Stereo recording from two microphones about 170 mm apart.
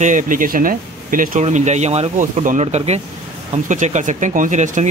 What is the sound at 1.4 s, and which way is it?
Speech, 45° right (ahead or behind).